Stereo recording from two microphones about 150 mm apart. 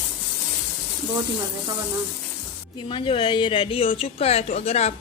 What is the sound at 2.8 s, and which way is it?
Speech, 35° left (ahead or behind).